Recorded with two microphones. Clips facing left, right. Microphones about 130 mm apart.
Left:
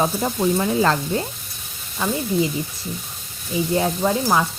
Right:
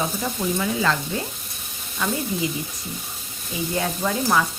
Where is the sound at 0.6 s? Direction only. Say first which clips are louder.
Left 2 dB; 35° left (ahead or behind).